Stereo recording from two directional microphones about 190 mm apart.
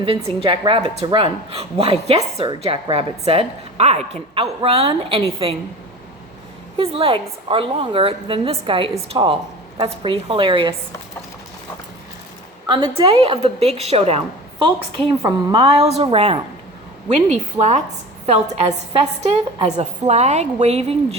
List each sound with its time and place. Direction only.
0.0 s a woman's voice: 30° right (ahead or behind)
6.7 s a woman's voice: 30° right (ahead or behind)
12.6 s a woman's voice: 25° right (ahead or behind)